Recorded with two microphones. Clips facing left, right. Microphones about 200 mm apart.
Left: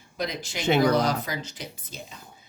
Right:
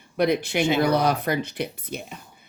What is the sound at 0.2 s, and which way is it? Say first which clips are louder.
Speech: right 10 dB; 60° right (ahead or behind).